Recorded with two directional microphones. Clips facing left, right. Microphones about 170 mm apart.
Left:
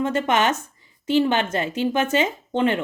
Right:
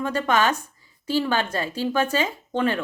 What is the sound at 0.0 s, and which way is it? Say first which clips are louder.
Speech: left 1 dB; 20° left (ahead or behind).